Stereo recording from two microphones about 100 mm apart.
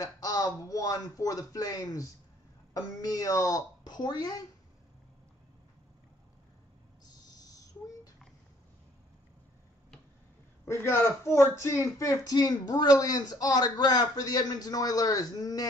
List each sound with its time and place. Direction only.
0.0 s a man's voice: 35° left (ahead or behind)
7.1 s owl: 40° left (ahead or behind)
10.6 s a man's voice: 25° left (ahead or behind)